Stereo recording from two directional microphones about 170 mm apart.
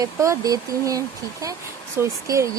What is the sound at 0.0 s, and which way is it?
Speech, 20° right (ahead or behind).